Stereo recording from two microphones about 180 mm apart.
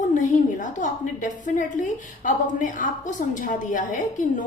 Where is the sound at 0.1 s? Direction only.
45° left (ahead or behind).